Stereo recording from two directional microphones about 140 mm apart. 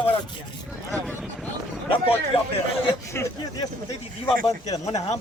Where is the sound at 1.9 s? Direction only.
40° left (ahead or behind).